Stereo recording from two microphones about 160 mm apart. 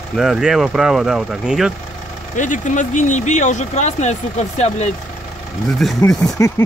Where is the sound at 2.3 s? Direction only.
50° left (ahead or behind).